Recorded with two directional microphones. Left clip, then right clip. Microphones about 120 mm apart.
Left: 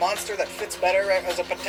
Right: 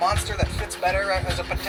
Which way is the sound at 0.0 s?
25° left (ahead or behind).